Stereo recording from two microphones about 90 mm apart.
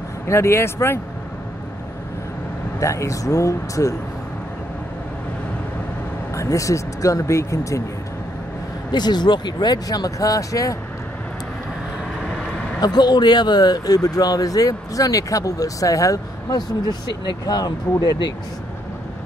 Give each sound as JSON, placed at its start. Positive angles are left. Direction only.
{"t": 0.3, "sound": "speech", "side_deg": 30}
{"t": 2.8, "sound": "speech", "side_deg": 35}
{"t": 6.3, "sound": "speech", "side_deg": 35}
{"t": 8.9, "sound": "speech", "side_deg": 55}
{"t": 12.2, "sound": "vehicle", "side_deg": 10}
{"t": 12.8, "sound": "speech", "side_deg": 50}